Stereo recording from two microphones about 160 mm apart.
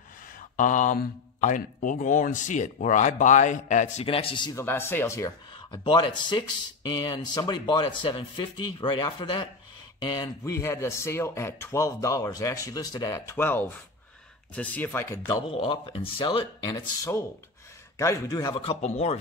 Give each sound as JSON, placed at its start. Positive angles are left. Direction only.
{"t": 0.6, "sound": "speech", "side_deg": 55}
{"t": 4.6, "sound": "speech", "side_deg": 15}
{"t": 5.5, "sound": "speech", "side_deg": 30}
{"t": 15.2, "sound": "speech", "side_deg": 35}
{"t": 18.6, "sound": "speech", "side_deg": 40}